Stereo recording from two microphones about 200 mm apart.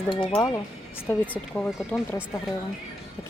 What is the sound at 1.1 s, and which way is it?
Speech, 10° left (ahead or behind).